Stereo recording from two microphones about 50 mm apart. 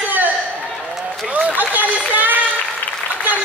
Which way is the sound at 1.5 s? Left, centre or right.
Right.